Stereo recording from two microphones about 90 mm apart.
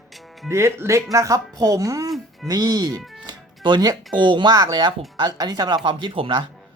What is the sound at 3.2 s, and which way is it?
Music, 60° right (ahead or behind).